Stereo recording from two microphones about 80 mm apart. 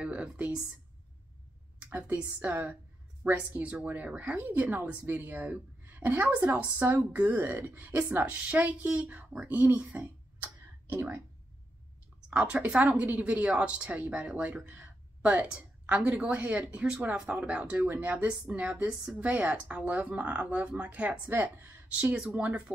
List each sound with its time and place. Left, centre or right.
0.0 s speech: centre
1.8 s a woman's voice: right
8.3 s speech: centre
12.3 s speech: centre
22.0 s speech: centre